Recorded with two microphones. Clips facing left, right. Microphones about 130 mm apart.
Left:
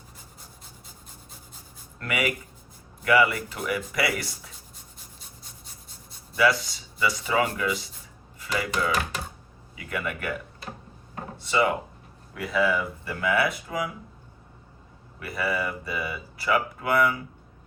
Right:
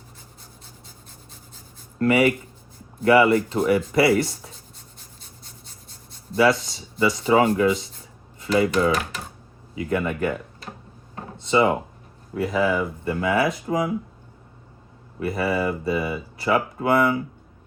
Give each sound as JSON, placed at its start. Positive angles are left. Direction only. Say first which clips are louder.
{"t": 2.0, "sound": "speech", "louder": "right 10 dB", "side_deg": -30}
{"t": 6.3, "sound": "speech", "louder": "right 4 dB", "side_deg": -25}
{"t": 8.4, "sound": "dishes", "louder": "right 8 dB", "side_deg": -30}
{"t": 9.7, "sound": "speech", "louder": "right 8 dB", "side_deg": -30}
{"t": 11.3, "sound": "drawer open or close", "louder": "right 5 dB", "side_deg": -25}
{"t": 12.3, "sound": "speech", "louder": "right 4 dB", "side_deg": -40}
{"t": 12.6, "sound": "speech", "louder": "right 4 dB", "side_deg": -25}
{"t": 15.2, "sound": "speech", "louder": "right 6 dB", "side_deg": -25}